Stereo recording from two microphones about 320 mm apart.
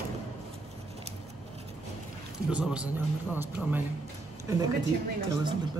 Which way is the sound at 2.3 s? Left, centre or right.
Centre.